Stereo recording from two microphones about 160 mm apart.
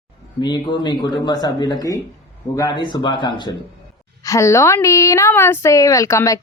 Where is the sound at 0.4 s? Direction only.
30° left (ahead or behind).